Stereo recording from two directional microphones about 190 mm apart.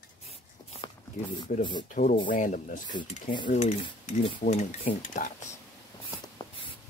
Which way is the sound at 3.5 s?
35° left (ahead or behind).